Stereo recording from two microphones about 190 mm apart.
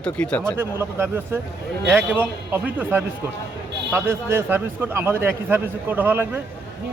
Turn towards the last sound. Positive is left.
turn(degrees=-10)  # may be behind; listen again after turning